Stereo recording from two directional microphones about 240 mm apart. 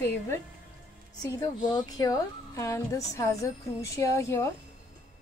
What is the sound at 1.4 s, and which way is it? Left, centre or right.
Speech, centre.